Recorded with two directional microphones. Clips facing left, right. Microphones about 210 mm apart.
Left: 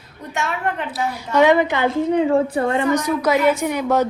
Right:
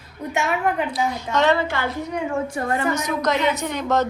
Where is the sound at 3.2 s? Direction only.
5° left (ahead or behind).